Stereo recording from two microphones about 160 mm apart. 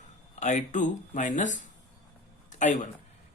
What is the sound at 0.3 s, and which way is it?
A man's voice, 50° left (ahead or behind).